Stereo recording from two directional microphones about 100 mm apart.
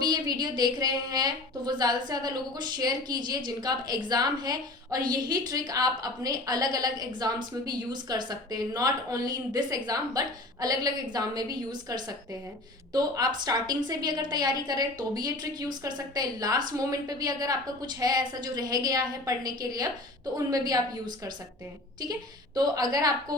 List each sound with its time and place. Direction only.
0.0 s a woman's voice: 45° right (ahead or behind)